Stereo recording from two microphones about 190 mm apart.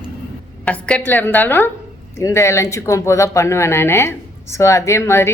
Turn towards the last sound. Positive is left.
turn(degrees=15)  # may be behind; listen again after turning